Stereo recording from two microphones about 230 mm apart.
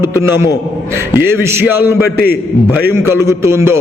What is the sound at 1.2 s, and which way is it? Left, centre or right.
Speech, centre.